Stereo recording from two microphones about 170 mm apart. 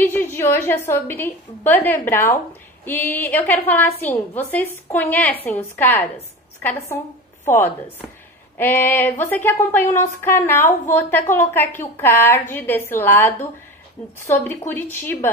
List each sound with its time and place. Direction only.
0.0 s a woman's voice: 15° left (ahead or behind)
4.1 s a woman's voice: 40° left (ahead or behind)
4.8 s a woman's voice: 10° left (ahead or behind)